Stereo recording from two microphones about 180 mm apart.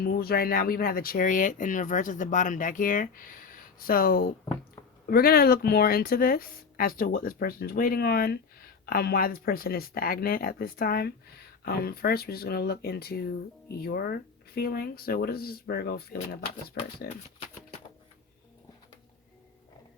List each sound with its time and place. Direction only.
0.0 s speech: 55° left (ahead or behind)